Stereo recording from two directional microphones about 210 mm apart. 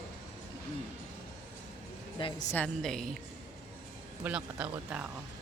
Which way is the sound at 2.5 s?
5° left (ahead or behind).